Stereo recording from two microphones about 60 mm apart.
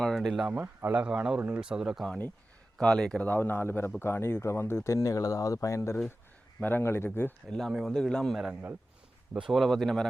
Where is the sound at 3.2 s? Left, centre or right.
Left.